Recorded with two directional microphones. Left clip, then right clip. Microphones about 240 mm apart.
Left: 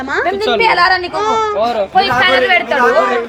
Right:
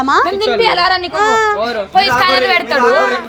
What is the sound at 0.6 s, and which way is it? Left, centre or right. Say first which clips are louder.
Speech: left 2 dB; centre.